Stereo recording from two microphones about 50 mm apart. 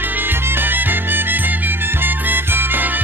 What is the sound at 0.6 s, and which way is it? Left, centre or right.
Music, right.